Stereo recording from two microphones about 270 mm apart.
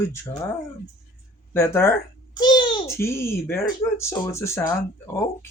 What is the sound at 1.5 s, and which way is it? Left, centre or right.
A child's voice, centre.